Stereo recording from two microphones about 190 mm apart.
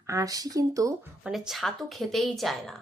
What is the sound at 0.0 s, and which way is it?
Speech, 15° right (ahead or behind).